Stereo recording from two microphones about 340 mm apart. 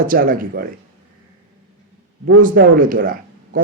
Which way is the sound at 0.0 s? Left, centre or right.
Right.